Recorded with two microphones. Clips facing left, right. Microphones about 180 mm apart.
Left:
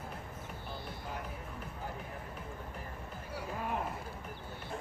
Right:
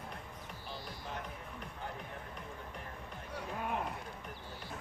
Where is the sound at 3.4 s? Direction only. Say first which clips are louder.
Left 1 dB; centre (ahead or behind).